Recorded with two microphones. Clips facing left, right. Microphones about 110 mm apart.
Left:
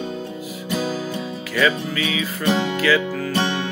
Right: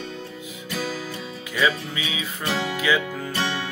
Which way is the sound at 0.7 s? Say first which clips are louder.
Left 5 dB; 25° left (ahead or behind).